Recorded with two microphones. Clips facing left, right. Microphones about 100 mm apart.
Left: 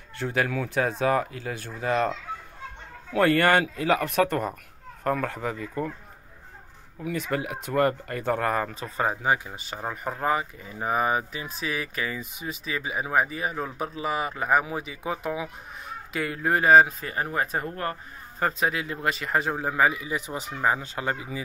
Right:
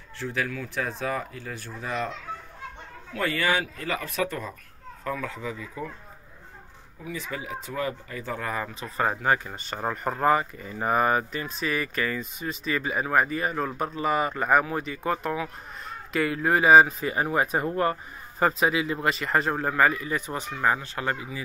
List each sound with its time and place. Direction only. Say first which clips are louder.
0.2 s speech: left 4 dB; 70° left (ahead or behind)
3.2 s speech: left 6 dB; 70° left (ahead or behind)
7.1 s speech: left 5 dB; 75° left (ahead or behind)
9.0 s speech: right 1 dB; 10° left (ahead or behind); by 17.9 s 15° right (ahead or behind)
18.4 s speech: right 3 dB; centre (ahead or behind); by 21.4 s 25° left (ahead or behind)